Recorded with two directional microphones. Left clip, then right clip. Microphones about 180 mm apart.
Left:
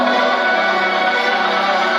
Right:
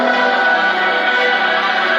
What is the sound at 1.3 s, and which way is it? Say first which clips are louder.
Music: right 1 dB; 20° left (ahead or behind).